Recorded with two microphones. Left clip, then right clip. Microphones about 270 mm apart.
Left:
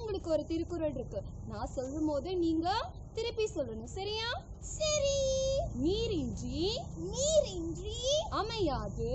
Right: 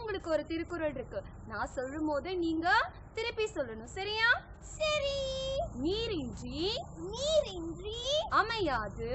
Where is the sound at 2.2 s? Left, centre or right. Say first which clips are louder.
Right 1 dB; centre.